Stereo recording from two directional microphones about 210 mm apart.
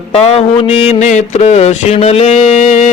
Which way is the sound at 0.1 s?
30° left (ahead or behind).